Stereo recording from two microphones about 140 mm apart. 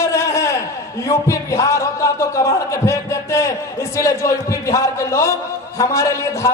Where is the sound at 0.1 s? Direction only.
20° left (ahead or behind).